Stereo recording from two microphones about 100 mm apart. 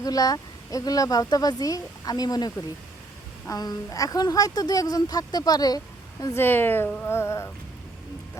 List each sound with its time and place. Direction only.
0.0 s a woman's voice: 40° left (ahead or behind)
6.3 s speech: 20° left (ahead or behind)